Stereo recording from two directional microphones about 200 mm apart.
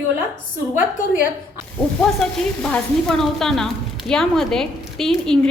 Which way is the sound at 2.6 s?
5° left (ahead or behind).